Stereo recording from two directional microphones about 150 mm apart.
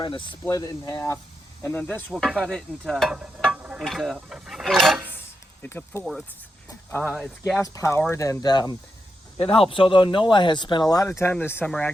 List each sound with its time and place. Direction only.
0.0 s speech: 30° left (ahead or behind); by 2.1 s 10° left (ahead or behind)
2.1 s a sound: 5° left (ahead or behind)
5.6 s speech: 15° left (ahead or behind)
6.0 s speech: centre (ahead or behind)
7.6 s speech: 20° left (ahead or behind)
9.4 s speech: 35° left (ahead or behind); by 11.7 s 10° left (ahead or behind)